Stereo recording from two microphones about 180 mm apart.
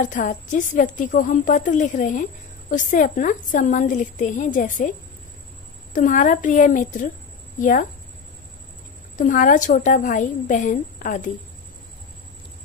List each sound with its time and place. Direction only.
0.0 s a woman's voice: 45° left (ahead or behind)
5.9 s a woman's voice: 45° left (ahead or behind)
9.2 s a woman's voice: 45° left (ahead or behind)